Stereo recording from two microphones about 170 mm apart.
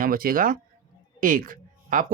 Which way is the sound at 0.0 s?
55° right (ahead or behind).